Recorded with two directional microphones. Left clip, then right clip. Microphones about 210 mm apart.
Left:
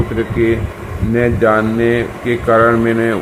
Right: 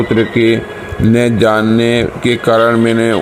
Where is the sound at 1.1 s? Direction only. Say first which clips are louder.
Right 1 dB; 45° right (ahead or behind).